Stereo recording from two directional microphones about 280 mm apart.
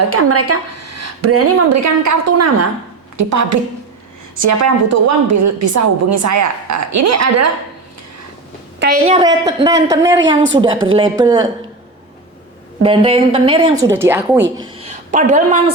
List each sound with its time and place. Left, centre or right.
0.1 s a woman's voice: right
9.0 s speech: centre
12.8 s speech: centre
14.8 s a sound: right